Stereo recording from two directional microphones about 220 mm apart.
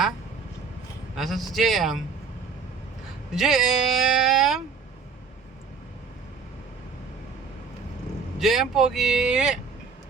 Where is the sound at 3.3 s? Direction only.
Centre (ahead or behind).